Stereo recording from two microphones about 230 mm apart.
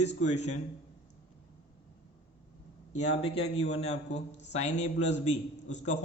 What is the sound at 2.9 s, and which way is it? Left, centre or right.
A man's voice, left.